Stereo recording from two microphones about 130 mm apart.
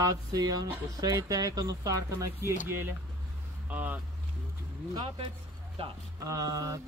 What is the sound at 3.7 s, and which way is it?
Speech, 10° right (ahead or behind).